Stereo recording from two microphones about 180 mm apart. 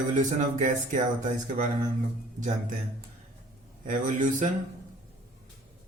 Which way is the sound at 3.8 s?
45° right (ahead or behind).